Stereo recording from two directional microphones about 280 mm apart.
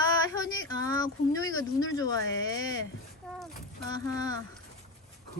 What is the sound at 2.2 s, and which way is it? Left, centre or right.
Speech, left.